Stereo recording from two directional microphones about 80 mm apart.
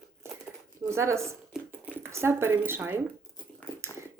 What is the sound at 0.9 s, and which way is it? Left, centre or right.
Speech, right.